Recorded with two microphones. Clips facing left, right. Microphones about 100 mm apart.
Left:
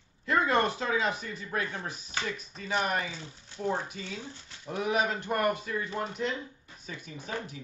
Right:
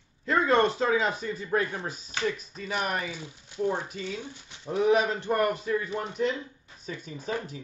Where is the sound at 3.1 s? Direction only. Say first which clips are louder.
Right 3 dB; 10° right (ahead or behind).